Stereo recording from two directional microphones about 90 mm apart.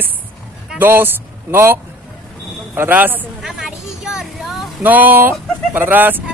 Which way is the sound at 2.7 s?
20° right (ahead or behind).